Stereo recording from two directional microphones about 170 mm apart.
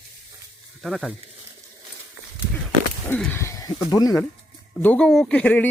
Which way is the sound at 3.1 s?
10° left (ahead or behind).